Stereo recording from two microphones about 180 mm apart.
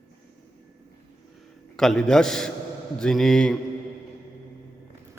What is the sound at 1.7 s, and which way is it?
A man's voice, 5° left (ahead or behind).